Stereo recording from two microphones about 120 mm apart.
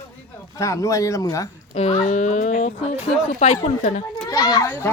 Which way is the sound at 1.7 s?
60° left (ahead or behind).